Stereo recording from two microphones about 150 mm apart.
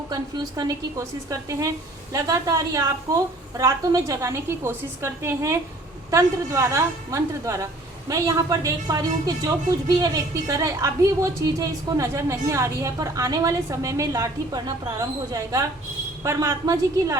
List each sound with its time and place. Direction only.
0.1 s a woman's voice: 25° right (ahead or behind)